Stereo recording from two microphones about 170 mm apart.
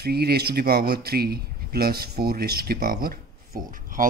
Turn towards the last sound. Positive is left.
turn(degrees=-55)  # may be behind; listen again after turning